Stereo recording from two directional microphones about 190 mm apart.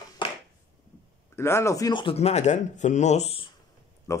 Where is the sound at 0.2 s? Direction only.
25° left (ahead or behind).